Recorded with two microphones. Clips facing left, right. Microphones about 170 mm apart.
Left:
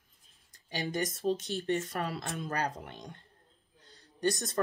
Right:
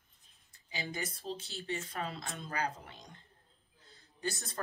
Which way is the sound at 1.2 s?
60° left (ahead or behind).